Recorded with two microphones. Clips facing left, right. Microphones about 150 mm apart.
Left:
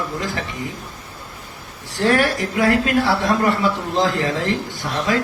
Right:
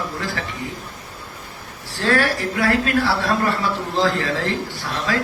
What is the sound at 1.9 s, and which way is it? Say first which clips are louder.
A man's voice: left 2 dB; 15° left (ahead or behind).